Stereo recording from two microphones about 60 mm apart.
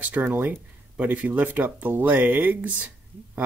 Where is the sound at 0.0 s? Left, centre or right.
Right.